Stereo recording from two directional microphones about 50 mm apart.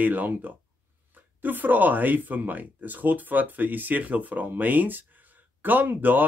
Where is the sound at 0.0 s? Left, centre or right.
Right.